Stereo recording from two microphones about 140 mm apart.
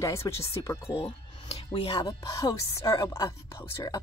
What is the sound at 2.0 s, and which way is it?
Speech, 30° left (ahead or behind).